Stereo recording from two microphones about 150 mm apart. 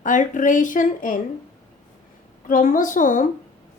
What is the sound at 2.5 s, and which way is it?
Speech, 60° left (ahead or behind).